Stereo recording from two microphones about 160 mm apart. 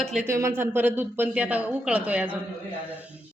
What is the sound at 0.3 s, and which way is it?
A woman's voice, 15° right (ahead or behind).